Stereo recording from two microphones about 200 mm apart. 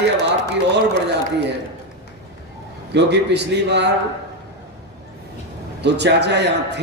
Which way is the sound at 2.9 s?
60° right (ahead or behind).